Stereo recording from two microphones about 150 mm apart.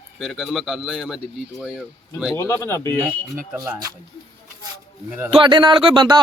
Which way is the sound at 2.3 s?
20° left (ahead or behind).